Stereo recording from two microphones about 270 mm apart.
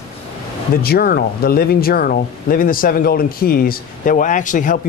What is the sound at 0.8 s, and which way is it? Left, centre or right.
Speech, left.